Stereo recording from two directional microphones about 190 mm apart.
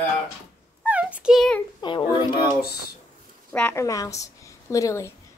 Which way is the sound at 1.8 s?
25° left (ahead or behind).